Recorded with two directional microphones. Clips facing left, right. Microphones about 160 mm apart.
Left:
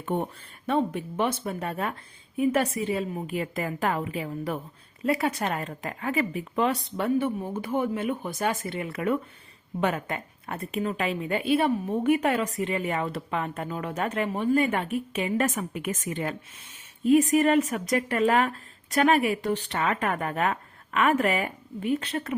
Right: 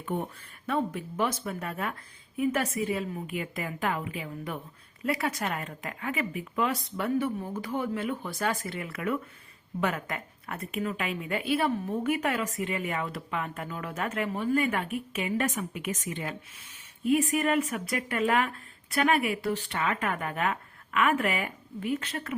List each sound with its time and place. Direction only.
0.0 s a woman's voice: 30° left (ahead or behind)
5.0 s a woman's voice: 30° left (ahead or behind)
15.4 s speech: 45° left (ahead or behind)
17.0 s speech: 35° left (ahead or behind)